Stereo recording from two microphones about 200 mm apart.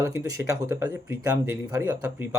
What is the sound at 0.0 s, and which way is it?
Speech, 15° right (ahead or behind).